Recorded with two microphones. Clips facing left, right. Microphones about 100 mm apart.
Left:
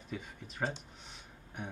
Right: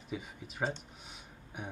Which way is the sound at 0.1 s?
5° right (ahead or behind).